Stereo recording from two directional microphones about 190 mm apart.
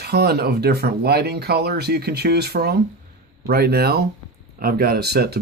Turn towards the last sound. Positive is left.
turn(degrees=-55)  # may be behind; listen again after turning